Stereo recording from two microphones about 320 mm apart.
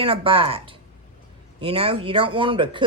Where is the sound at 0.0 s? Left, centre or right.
Centre.